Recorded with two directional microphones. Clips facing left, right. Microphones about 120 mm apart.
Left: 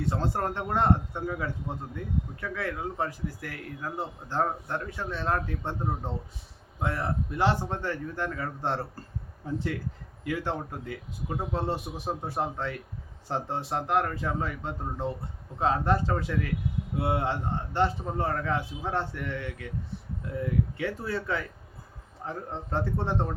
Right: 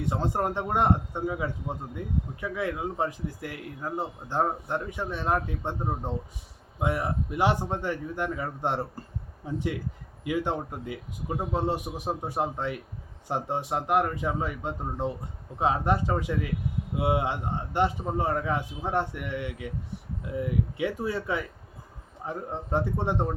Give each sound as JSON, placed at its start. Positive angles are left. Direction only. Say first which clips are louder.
{"t": 0.0, "sound": "speech", "louder": "right 1 dB", "side_deg": -15}